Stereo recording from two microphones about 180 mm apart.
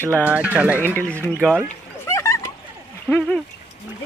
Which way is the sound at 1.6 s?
15° left (ahead or behind).